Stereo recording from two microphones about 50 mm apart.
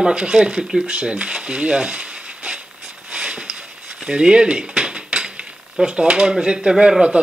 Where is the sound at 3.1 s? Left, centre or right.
Centre.